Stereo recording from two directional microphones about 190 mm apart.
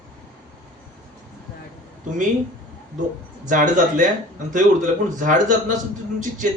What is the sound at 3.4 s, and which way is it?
Speech, 45° right (ahead or behind).